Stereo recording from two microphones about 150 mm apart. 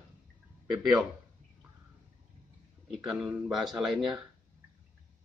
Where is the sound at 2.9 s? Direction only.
Centre (ahead or behind).